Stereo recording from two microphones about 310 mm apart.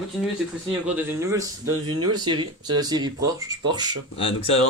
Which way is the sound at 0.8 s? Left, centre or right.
Centre.